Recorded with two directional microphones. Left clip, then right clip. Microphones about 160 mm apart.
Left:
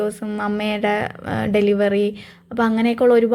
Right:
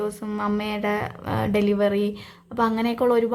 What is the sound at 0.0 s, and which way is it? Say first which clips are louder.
A woman's voice: left 4 dB; 15° left (ahead or behind).